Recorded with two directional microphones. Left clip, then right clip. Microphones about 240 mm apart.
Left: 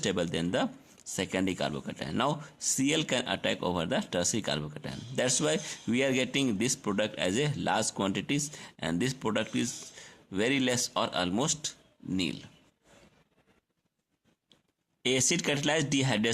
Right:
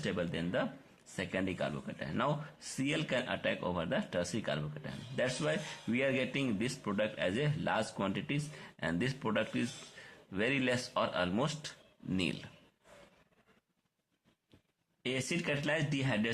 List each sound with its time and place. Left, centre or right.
0.0 s speech: left
15.0 s speech: left